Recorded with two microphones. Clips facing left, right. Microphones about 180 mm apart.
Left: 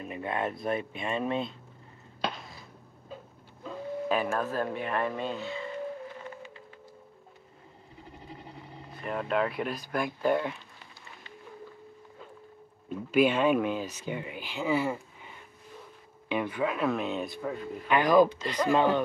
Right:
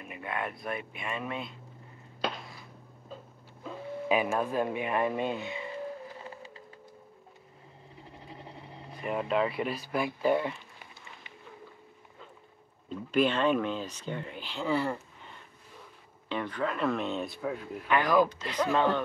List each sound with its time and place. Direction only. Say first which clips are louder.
0.0 s speech: left 4 dB; 30° left (ahead or behind)
3.6 s speech: left 1 dB; 10° right (ahead or behind)
8.9 s speech: even; 5° right (ahead or behind)
12.9 s speech: left 3 dB; 10° left (ahead or behind)
17.8 s speech: left 3 dB; 15° left (ahead or behind)